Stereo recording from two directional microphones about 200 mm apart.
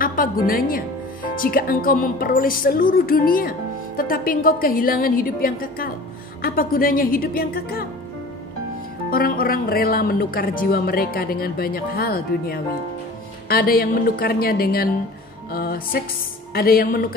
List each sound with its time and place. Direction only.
0.0 s speech: 45° left (ahead or behind)
9.1 s speech: 45° left (ahead or behind)